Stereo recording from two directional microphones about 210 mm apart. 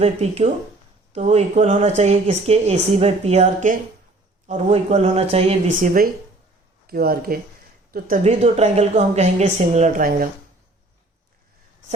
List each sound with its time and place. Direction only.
0.0 s speech: 30° right (ahead or behind)
6.8 s speech: 45° right (ahead or behind)
8.2 s speech: 30° right (ahead or behind)